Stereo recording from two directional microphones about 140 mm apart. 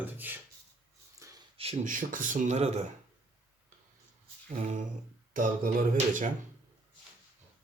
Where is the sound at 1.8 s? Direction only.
70° right (ahead or behind); by 2.8 s 50° right (ahead or behind).